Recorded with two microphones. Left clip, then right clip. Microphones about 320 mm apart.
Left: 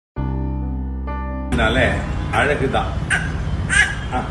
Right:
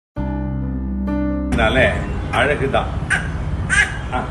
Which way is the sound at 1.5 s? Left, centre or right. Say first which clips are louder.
Right 1 dB; centre.